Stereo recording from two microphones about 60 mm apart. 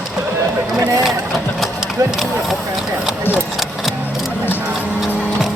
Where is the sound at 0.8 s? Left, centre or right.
Right.